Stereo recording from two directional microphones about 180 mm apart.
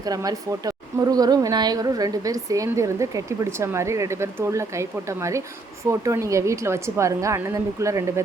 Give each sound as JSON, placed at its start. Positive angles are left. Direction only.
{"t": 0.0, "sound": "a woman's voice", "side_deg": -20}